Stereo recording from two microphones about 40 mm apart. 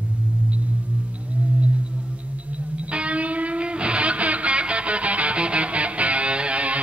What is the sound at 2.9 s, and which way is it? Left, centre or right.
Music, right.